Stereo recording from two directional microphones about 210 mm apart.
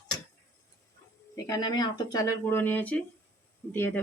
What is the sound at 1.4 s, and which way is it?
Speech, 20° left (ahead or behind).